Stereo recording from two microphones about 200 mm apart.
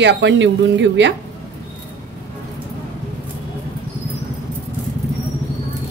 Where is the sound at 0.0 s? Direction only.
65° right (ahead or behind).